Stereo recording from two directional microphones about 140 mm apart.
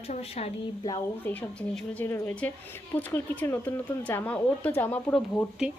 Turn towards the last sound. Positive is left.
turn(degrees=10)  # may be behind; listen again after turning